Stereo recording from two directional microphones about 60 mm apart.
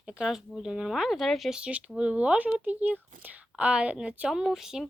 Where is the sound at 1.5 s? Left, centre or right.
Centre.